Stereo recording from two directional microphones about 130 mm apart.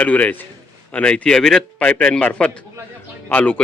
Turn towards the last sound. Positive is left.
turn(degrees=10)  # may be behind; listen again after turning